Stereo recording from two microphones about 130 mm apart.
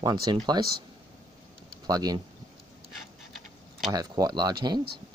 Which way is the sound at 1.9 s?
30° right (ahead or behind).